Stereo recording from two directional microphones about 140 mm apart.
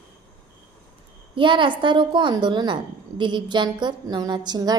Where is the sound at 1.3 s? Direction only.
35° right (ahead or behind).